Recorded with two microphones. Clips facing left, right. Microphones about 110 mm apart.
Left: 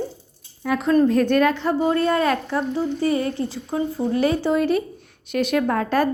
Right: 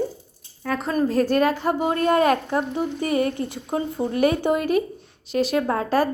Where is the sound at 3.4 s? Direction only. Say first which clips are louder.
Left 1 dB; 55° right (ahead or behind).